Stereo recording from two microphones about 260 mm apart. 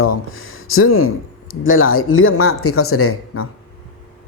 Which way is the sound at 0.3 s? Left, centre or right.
Left.